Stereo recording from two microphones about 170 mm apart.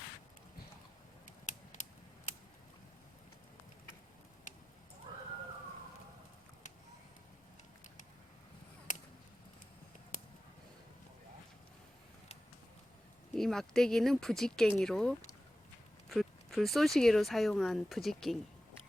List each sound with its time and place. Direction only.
1.5 s mechanisms: 45° left (ahead or behind)
4.5 s a sound: 45° left (ahead or behind)
13.3 s speech: centre (ahead or behind)